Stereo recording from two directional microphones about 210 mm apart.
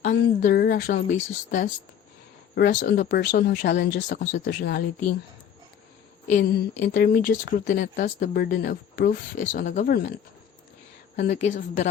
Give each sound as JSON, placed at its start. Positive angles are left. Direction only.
{"t": 0.1, "sound": "a woman's voice", "side_deg": 45}
{"t": 6.2, "sound": "speech", "side_deg": 40}
{"t": 11.3, "sound": "a woman's voice", "side_deg": 35}